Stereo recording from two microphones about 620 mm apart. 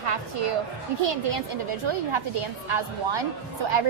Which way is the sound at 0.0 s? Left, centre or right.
Right.